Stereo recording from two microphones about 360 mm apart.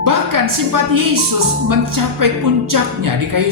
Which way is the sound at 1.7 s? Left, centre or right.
Right.